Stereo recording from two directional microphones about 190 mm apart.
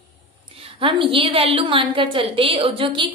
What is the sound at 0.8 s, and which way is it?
A woman's voice, 30° right (ahead or behind).